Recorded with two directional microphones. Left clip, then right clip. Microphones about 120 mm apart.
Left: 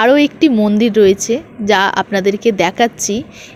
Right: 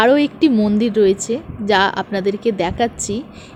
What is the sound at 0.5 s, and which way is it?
Speech, 15° left (ahead or behind).